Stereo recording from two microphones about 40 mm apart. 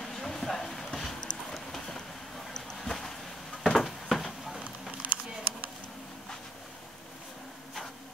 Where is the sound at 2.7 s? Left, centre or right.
Centre.